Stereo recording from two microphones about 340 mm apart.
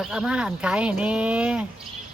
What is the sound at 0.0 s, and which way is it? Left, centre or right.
Speech, centre.